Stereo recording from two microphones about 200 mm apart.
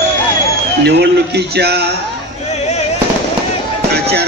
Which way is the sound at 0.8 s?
55° right (ahead or behind).